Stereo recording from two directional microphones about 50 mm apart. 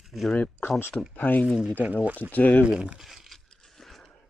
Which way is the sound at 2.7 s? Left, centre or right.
Centre.